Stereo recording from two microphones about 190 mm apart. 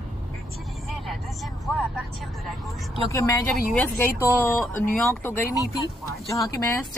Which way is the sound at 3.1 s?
15° left (ahead or behind).